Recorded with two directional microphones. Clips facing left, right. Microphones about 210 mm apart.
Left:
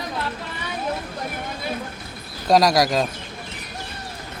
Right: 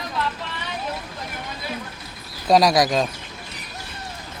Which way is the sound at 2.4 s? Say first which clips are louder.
Even; centre (ahead or behind).